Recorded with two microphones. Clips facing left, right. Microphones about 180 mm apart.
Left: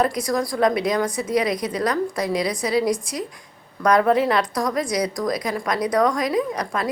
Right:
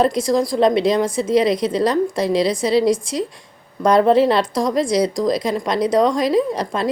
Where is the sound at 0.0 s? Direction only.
25° right (ahead or behind).